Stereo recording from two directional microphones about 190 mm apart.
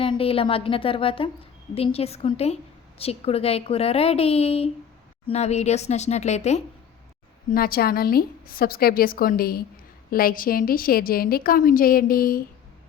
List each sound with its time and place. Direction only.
0.0 s a woman's voice: 30° left (ahead or behind)
7.5 s a woman's voice: 50° left (ahead or behind)